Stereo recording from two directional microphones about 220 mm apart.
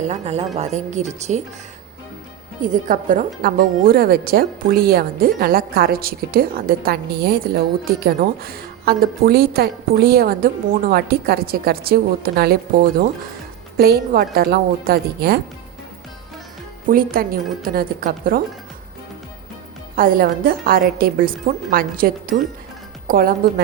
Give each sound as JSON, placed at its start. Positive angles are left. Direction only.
{"t": 0.1, "sound": "a woman's voice", "side_deg": -30}
{"t": 2.6, "sound": "speech", "side_deg": -35}
{"t": 13.7, "sound": "speech", "side_deg": -45}
{"t": 16.8, "sound": "a woman's voice", "side_deg": -40}
{"t": 20.0, "sound": "a woman's voice", "side_deg": -40}